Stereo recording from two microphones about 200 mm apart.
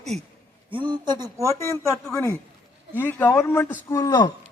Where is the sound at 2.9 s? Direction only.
10° left (ahead or behind).